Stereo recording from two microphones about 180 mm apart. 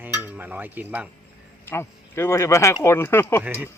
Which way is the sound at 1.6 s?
15° left (ahead or behind).